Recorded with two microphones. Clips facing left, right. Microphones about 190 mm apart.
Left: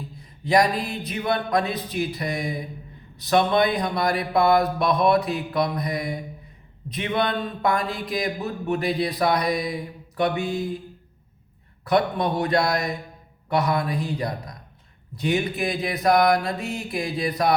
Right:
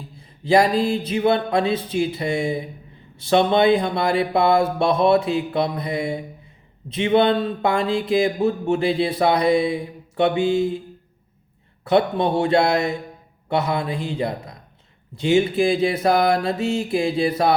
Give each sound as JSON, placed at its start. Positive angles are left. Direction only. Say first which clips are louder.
{"t": 0.2, "sound": "speech", "louder": "right 3 dB", "side_deg": -25}
{"t": 11.9, "sound": "speech", "louder": "right 3 dB", "side_deg": -25}